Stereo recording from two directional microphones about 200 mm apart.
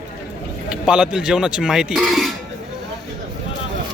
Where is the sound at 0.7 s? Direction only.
5° right (ahead or behind).